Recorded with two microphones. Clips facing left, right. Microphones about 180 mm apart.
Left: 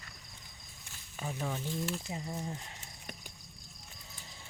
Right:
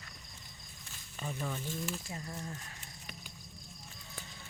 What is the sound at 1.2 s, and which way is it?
Speech, 10° left (ahead or behind).